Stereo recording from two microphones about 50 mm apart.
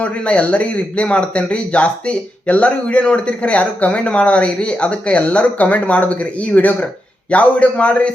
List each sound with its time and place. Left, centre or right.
0.0 s speech: left